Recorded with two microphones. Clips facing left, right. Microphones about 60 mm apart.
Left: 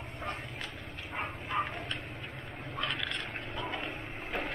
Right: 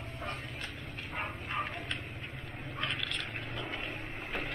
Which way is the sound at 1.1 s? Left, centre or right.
Centre.